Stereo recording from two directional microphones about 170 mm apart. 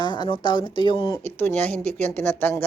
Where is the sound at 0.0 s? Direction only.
25° left (ahead or behind).